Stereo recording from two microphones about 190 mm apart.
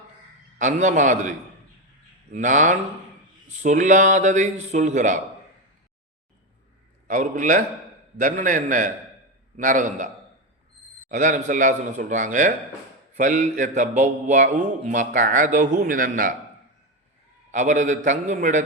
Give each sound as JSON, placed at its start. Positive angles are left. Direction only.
{"t": 0.6, "sound": "mantra", "side_deg": -40}
{"t": 7.1, "sound": "a man's voice", "side_deg": -45}
{"t": 11.1, "sound": "mantra", "side_deg": -40}
{"t": 17.5, "sound": "mantra", "side_deg": -40}